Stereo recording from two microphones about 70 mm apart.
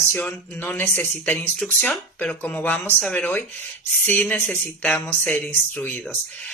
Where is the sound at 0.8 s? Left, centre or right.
Left.